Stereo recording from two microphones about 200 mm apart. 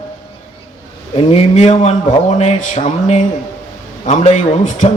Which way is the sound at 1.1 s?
30° left (ahead or behind).